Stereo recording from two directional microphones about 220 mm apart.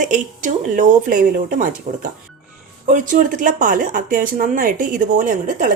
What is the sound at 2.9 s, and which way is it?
Speech, 35° right (ahead or behind).